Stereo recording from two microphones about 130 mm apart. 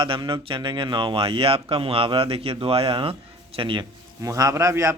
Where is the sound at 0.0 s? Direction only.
40° right (ahead or behind).